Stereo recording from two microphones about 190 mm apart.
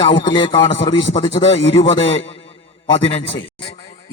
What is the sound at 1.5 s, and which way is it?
Speech, 30° left (ahead or behind).